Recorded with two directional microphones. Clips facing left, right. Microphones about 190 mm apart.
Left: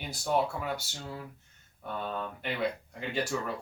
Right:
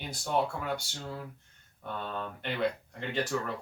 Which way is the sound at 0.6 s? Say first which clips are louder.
Right 1 dB; 5° left (ahead or behind).